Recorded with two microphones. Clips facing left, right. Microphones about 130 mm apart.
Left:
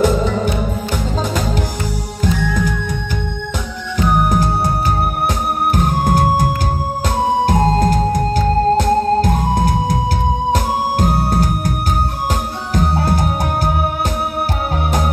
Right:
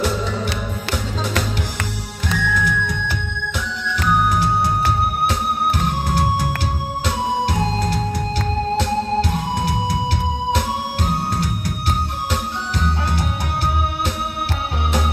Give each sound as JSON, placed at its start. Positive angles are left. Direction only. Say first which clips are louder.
{"t": 0.0, "sound": "music", "louder": "left 7 dB", "side_deg": 45}
{"t": 2.4, "sound": "music", "louder": "left 2 dB", "side_deg": 40}
{"t": 4.1, "sound": "music", "louder": "left 2 dB", "side_deg": 45}
{"t": 5.8, "sound": "music", "louder": "left 5 dB", "side_deg": 45}
{"t": 12.7, "sound": "music", "louder": "left 8 dB", "side_deg": 45}